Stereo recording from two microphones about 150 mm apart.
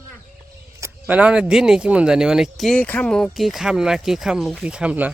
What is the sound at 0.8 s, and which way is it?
A man's voice, 10° right (ahead or behind).